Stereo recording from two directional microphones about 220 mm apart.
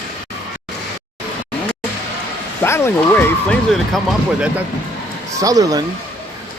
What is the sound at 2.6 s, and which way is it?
Speech, 10° left (ahead or behind).